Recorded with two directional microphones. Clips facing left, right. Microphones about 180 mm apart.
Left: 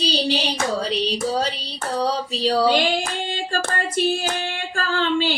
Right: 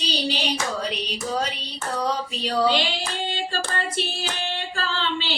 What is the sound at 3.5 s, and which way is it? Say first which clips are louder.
Hands: left 7 dB; 45° left (ahead or behind).